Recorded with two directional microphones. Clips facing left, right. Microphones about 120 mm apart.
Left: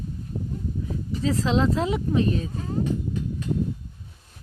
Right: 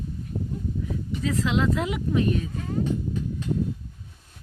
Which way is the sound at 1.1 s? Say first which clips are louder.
Left 2 dB; 35° left (ahead or behind).